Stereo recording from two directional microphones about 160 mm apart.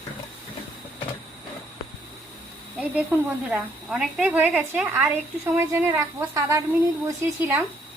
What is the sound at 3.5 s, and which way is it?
A woman's voice, 5° right (ahead or behind).